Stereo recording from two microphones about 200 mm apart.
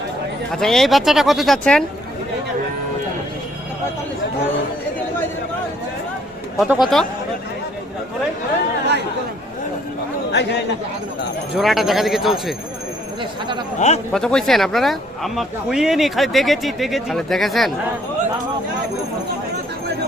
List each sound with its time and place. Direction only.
0.5 s speech: centre (ahead or behind)
6.6 s speech: centre (ahead or behind)
11.5 s speech: centre (ahead or behind)
13.7 s a man's voice: 35° left (ahead or behind)
14.1 s speech: 5° left (ahead or behind)